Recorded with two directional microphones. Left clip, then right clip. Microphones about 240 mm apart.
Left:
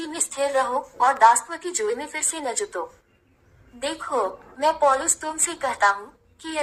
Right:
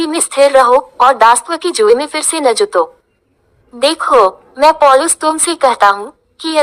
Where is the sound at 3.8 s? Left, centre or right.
Right.